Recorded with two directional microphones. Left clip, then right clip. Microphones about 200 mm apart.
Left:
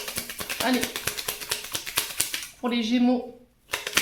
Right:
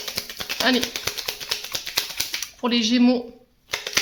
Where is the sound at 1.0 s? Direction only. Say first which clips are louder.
Right 3 dB; 20° right (ahead or behind).